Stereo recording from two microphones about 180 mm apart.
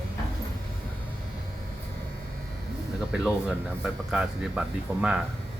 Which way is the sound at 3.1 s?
5° right (ahead or behind).